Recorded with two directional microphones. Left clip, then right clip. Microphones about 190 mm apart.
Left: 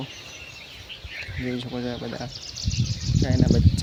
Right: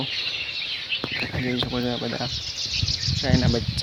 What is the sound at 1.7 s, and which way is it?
Speech, 30° right (ahead or behind).